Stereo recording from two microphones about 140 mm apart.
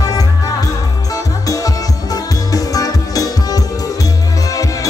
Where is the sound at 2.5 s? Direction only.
25° left (ahead or behind).